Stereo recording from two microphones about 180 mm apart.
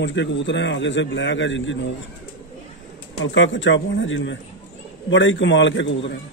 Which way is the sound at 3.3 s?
90° left.